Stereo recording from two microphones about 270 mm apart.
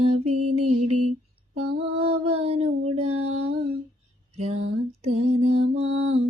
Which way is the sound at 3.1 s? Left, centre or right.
Right.